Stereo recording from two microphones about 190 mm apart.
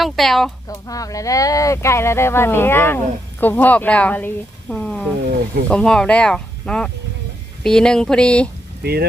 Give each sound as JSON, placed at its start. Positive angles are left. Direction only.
{"t": 0.0, "sound": "speech", "side_deg": 0}
{"t": 0.7, "sound": "speech", "side_deg": 20}
{"t": 8.8, "sound": "speech", "side_deg": -55}